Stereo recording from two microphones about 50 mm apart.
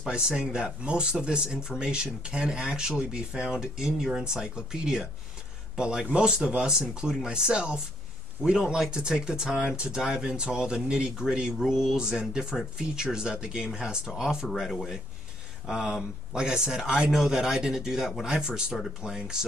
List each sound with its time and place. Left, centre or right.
0.1 s speech: centre
15.6 s speech: centre